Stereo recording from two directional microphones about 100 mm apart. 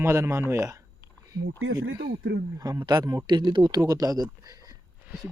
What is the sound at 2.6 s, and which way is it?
Speech, 35° right (ahead or behind).